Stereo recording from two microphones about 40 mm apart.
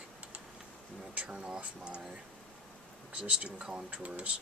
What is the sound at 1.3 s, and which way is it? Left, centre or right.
Speech, right.